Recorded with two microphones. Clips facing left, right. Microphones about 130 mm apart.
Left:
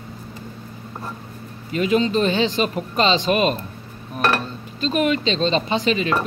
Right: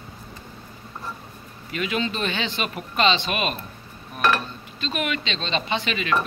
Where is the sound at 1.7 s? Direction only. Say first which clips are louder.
Left 7 dB; 35° left (ahead or behind).